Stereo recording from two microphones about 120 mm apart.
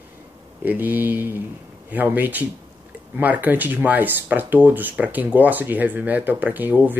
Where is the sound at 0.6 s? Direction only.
15° right (ahead or behind).